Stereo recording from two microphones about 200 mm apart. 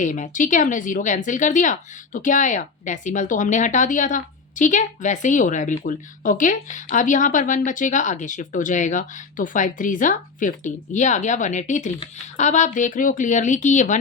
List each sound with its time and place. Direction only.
0.0 s speech: 40° left (ahead or behind)